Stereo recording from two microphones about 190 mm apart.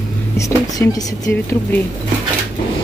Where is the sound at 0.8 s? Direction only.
10° left (ahead or behind).